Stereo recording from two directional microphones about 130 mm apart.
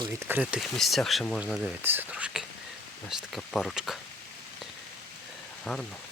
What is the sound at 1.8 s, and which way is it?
Whispering, 15° right (ahead or behind).